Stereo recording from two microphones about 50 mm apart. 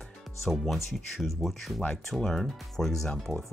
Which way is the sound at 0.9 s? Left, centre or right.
Centre.